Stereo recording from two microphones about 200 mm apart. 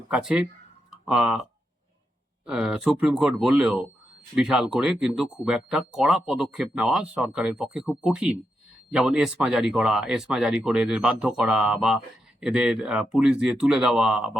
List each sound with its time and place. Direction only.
0.1 s speech: 5° right (ahead or behind)
2.5 s speech: 5° right (ahead or behind)